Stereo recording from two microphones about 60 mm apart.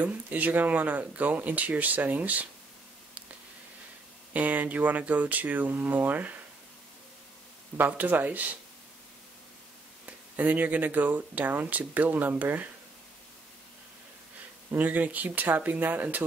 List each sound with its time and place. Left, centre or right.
0.0 s speech: right
4.3 s speech: right
7.7 s speech: right
10.0 s speech: right
14.8 s speech: right